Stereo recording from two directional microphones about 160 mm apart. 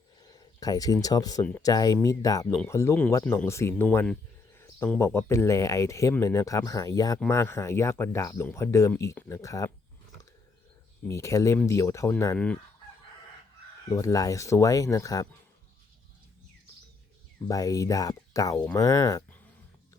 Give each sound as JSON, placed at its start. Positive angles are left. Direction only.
{"t": 0.2, "sound": "speech", "side_deg": 25}
{"t": 4.5, "sound": "a sound", "side_deg": 15}
{"t": 4.9, "sound": "speech", "side_deg": 15}
{"t": 11.1, "sound": "speech", "side_deg": 20}
{"t": 13.9, "sound": "speech", "side_deg": 20}
{"t": 17.5, "sound": "speech", "side_deg": 20}